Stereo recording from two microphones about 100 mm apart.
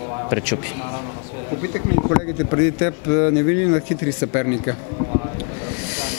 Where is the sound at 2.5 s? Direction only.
20° left (ahead or behind).